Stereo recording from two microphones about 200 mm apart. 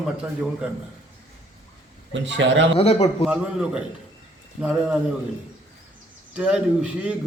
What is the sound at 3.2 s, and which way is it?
A man's voice, 5° right (ahead or behind).